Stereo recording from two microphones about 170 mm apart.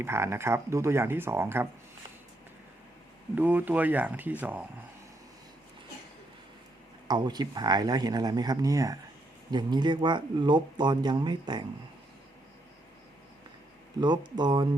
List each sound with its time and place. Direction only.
0.0 s speech: 15° right (ahead or behind)
3.3 s speech: 10° right (ahead or behind)
7.1 s speech: 25° right (ahead or behind)
14.0 s speech: 25° right (ahead or behind)